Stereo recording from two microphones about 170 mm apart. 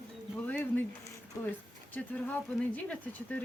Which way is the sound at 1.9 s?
10° left (ahead or behind).